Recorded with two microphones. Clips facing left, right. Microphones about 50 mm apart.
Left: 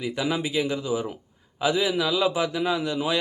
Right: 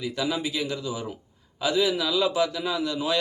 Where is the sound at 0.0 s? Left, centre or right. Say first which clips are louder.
Left 1 dB; left.